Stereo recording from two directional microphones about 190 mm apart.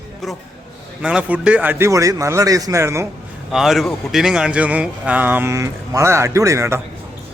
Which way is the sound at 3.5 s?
Centre (ahead or behind).